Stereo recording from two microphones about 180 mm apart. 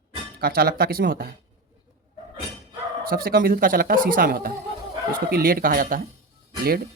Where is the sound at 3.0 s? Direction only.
55° right (ahead or behind).